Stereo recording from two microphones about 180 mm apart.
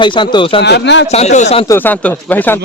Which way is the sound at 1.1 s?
40° left (ahead or behind).